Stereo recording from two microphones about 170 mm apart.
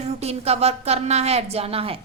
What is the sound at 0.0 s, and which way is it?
A woman's voice, 40° right (ahead or behind).